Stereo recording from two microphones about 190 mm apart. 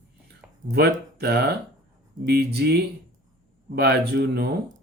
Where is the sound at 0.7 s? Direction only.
55° right (ahead or behind).